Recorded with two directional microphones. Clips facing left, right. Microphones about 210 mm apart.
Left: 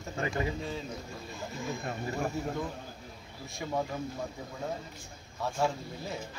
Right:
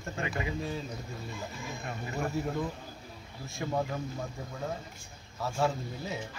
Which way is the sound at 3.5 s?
Centre (ahead or behind).